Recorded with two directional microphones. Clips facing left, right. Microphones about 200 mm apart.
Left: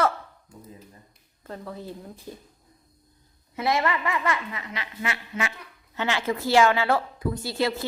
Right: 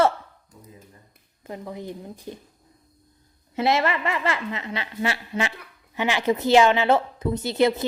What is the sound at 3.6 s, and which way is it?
A woman's voice, 25° right (ahead or behind).